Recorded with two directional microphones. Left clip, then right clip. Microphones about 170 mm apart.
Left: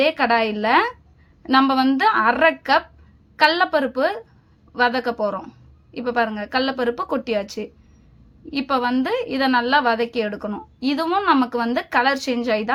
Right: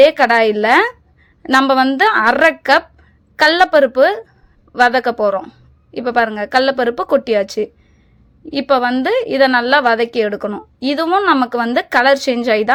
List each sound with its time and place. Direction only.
0.0 s a woman's voice: 35° right (ahead or behind)